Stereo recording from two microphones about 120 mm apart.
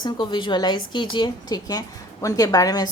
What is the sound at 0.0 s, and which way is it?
A woman's voice, 40° left (ahead or behind).